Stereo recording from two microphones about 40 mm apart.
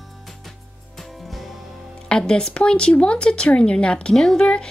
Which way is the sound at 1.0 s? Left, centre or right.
Centre.